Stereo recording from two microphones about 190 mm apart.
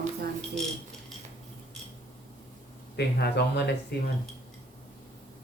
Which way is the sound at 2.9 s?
60° left (ahead or behind).